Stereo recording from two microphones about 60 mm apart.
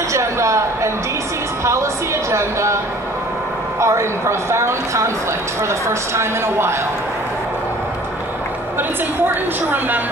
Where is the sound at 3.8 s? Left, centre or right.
Right.